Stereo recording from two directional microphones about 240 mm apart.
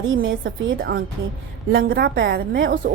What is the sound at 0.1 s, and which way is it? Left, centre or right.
A woman's voice, right.